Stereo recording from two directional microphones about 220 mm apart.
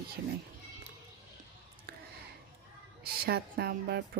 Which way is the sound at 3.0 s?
45° right (ahead or behind).